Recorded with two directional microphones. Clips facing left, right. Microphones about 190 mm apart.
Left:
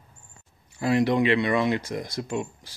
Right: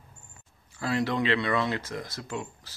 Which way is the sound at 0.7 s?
15° left (ahead or behind).